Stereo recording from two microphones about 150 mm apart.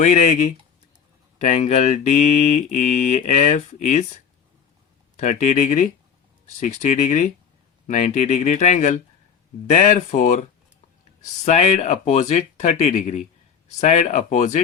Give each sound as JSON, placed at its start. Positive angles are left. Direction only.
{"t": 0.0, "sound": "speech", "side_deg": 55}
{"t": 1.4, "sound": "speech", "side_deg": 50}
{"t": 5.2, "sound": "speech", "side_deg": 55}
{"t": 11.4, "sound": "speech", "side_deg": 45}